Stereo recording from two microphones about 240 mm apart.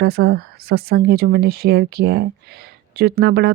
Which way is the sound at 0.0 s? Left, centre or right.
Right.